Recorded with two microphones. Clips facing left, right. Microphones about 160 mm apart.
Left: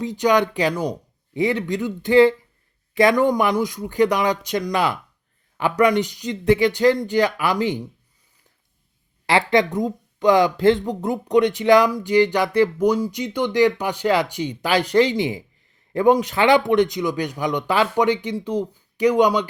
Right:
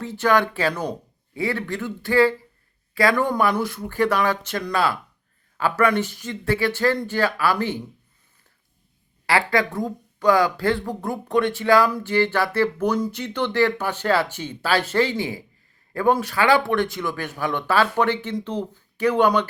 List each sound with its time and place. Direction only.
0.0 s a man's voice: 15° left (ahead or behind)
9.2 s a man's voice: 20° left (ahead or behind)